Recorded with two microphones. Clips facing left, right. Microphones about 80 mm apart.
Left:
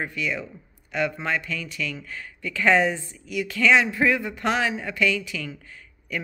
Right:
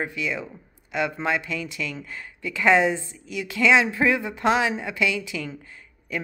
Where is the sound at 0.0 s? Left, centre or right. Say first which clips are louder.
Even; right.